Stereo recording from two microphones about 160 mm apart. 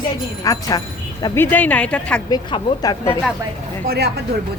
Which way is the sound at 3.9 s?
90° right.